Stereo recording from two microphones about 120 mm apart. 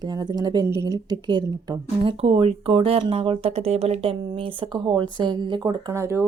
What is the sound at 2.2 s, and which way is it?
A woman's voice, 55° right (ahead or behind).